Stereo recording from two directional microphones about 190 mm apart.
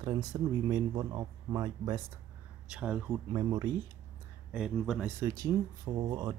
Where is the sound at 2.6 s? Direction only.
5° right (ahead or behind).